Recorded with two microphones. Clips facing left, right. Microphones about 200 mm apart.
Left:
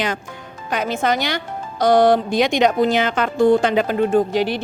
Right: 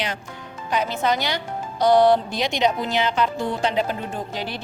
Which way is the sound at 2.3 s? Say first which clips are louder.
Left 6 dB; 50° left (ahead or behind).